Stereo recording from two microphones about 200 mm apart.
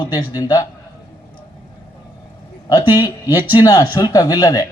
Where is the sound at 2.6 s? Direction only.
20° left (ahead or behind).